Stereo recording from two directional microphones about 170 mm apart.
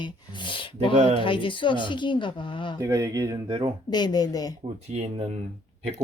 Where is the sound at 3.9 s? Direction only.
25° left (ahead or behind).